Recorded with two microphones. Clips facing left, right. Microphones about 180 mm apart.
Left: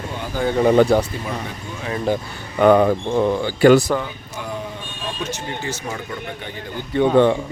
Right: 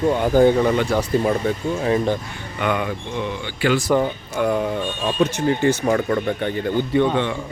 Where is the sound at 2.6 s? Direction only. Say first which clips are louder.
Left 9 dB; 40° left (ahead or behind).